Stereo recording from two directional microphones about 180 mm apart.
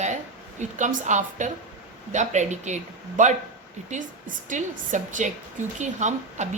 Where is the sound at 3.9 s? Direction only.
45° right (ahead or behind).